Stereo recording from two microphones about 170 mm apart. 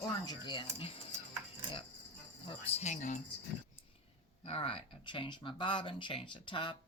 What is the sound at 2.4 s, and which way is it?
Speech, 40° left (ahead or behind).